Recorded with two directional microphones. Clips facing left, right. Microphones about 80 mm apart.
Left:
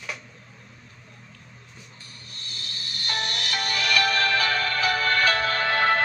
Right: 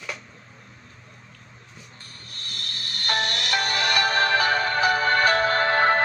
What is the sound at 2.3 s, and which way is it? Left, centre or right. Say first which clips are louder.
Music: right 3 dB; right.